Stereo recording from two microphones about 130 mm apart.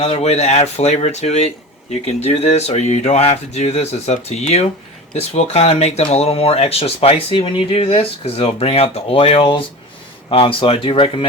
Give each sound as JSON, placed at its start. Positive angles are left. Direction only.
{"t": 0.0, "sound": "speech", "side_deg": 50}